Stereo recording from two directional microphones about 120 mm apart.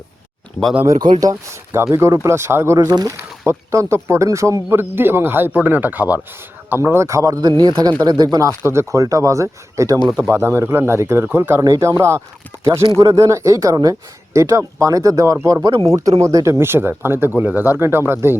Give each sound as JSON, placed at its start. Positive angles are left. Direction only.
{"t": 0.9, "sound": "speech", "side_deg": -35}
{"t": 1.2, "sound": "speech", "side_deg": -25}
{"t": 2.7, "sound": "speech", "side_deg": -35}
{"t": 3.2, "sound": "speech", "side_deg": -20}